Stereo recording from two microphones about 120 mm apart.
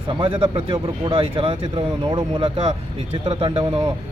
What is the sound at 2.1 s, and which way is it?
Speech, 40° right (ahead or behind).